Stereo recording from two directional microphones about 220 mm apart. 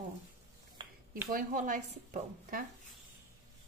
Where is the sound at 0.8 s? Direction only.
20° right (ahead or behind).